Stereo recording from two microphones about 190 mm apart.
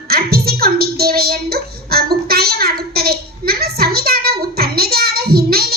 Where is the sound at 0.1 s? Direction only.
55° right (ahead or behind).